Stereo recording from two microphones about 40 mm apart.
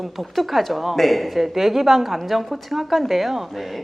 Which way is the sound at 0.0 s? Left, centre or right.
Centre.